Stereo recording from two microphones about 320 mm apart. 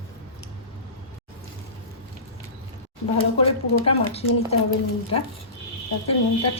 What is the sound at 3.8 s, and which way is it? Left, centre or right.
Speech, centre.